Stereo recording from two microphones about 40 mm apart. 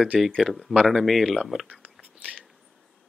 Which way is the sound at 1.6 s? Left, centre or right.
Right.